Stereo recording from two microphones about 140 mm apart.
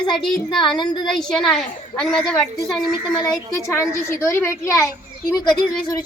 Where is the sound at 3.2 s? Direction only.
25° left (ahead or behind).